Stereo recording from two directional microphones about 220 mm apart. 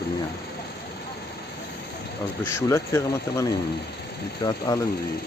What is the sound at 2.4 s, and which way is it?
Speech, 10° left (ahead or behind).